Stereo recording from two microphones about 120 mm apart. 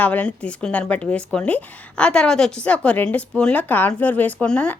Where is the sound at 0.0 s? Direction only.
10° left (ahead or behind).